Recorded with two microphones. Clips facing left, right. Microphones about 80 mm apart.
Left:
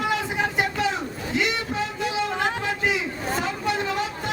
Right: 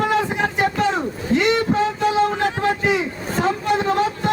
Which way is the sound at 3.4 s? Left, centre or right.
Right.